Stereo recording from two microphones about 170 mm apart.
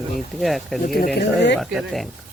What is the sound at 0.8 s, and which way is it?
Speech, 55° left (ahead or behind).